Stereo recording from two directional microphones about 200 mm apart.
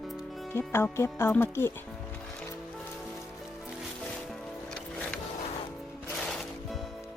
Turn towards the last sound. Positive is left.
turn(degrees=0)  # may be behind; listen again after turning